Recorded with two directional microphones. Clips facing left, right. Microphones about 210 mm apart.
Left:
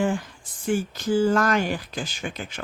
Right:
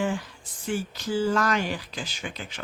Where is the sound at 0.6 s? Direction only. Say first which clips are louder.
Left 5 dB; 50° left (ahead or behind).